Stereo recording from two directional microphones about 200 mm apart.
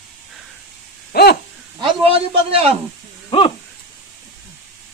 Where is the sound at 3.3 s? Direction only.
25° left (ahead or behind).